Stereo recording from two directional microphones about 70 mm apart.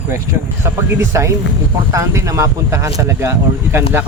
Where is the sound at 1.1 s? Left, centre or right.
Right.